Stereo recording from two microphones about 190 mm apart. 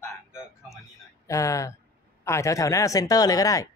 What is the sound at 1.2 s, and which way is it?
Speech, 15° left (ahead or behind).